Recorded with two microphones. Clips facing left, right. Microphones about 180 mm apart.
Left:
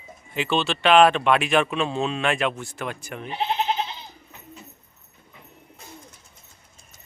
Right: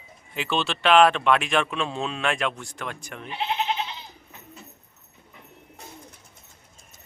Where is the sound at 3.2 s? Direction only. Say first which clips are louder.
Left 2 dB; 35° left (ahead or behind).